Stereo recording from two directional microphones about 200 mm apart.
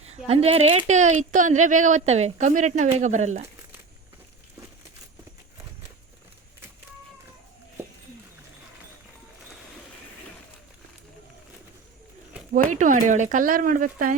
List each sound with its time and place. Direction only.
0.3 s speech: 30° right (ahead or behind)
12.7 s speech: 40° right (ahead or behind)